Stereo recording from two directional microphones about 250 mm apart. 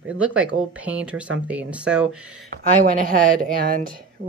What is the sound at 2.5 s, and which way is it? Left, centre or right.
Speech, right.